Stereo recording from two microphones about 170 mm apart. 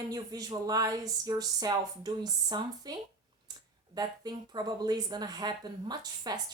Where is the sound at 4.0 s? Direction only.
25° right (ahead or behind).